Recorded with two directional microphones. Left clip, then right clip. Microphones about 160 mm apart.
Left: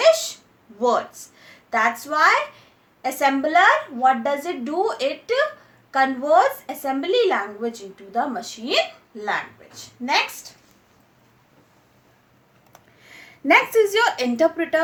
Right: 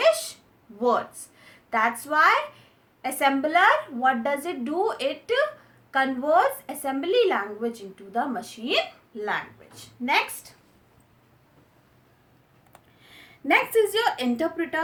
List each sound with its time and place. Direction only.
0.8 s speech: 5° left (ahead or behind)
13.1 s a woman's voice: 45° left (ahead or behind)